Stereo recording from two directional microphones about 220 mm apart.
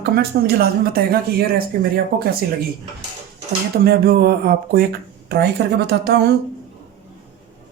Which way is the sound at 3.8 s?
45° right (ahead or behind).